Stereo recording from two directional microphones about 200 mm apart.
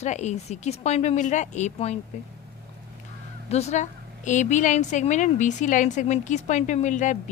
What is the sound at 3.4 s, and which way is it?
A woman's voice, 30° left (ahead or behind).